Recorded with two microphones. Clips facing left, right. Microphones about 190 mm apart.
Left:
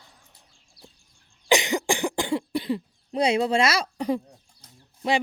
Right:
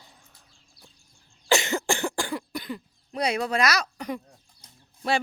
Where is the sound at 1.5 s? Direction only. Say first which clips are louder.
Left 2 dB; 15° left (ahead or behind).